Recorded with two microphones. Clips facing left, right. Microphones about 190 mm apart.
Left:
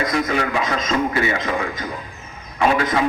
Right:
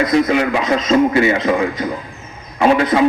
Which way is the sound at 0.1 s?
25° right (ahead or behind).